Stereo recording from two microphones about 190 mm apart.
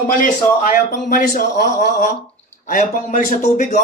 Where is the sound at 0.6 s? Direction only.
45° left (ahead or behind).